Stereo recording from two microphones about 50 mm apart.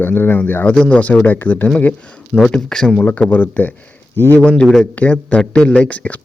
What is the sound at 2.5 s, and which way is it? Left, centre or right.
Speech, centre.